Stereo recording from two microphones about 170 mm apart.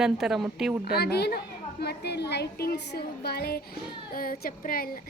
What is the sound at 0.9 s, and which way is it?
A woman's voice, 70° left (ahead or behind).